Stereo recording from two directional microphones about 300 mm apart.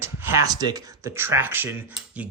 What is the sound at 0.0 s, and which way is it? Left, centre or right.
Speech, centre.